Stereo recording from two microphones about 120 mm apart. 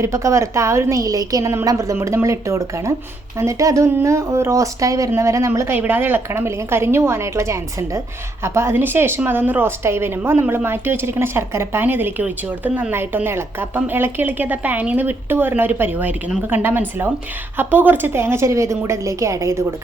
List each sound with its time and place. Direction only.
0.0 s a woman's voice: 25° right (ahead or behind)